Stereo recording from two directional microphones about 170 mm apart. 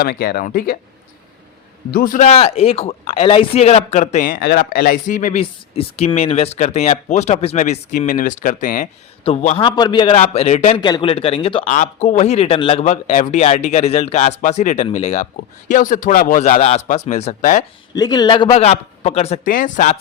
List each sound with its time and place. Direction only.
0.0 s speech: 60° left (ahead or behind)
1.9 s speech: 60° left (ahead or behind)
5.4 s speech: 35° left (ahead or behind)
9.6 s a man's voice: 25° left (ahead or behind)
10.2 s speech: 40° left (ahead or behind)
10.8 s speech: 25° left (ahead or behind)
15.7 s speech: 50° left (ahead or behind)
16.6 s speech: 40° left (ahead or behind)
17.9 s speech: 25° left (ahead or behind); by 19.4 s 40° left (ahead or behind)
19.5 s speech: 50° left (ahead or behind)